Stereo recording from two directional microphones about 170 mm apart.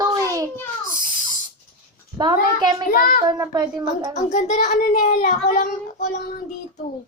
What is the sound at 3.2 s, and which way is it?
Speech, 25° right (ahead or behind).